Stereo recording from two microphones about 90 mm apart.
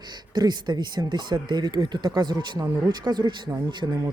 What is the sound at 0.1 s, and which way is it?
A man's voice, 50° right (ahead or behind).